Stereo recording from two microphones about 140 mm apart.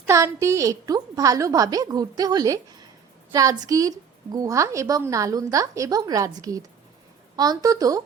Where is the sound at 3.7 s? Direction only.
25° right (ahead or behind).